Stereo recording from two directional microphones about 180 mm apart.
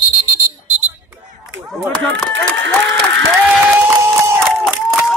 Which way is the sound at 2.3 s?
90° right.